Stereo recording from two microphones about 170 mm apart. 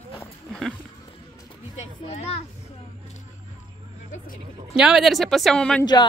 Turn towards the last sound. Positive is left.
turn(degrees=5)  # may be behind; listen again after turning